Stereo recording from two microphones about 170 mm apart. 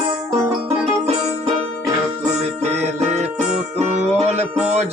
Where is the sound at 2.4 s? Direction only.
40° right (ahead or behind).